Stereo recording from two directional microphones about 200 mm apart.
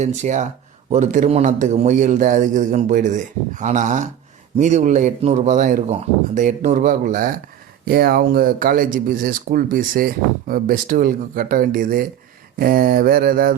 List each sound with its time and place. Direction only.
0.0 s a man's voice: 35° right (ahead or behind)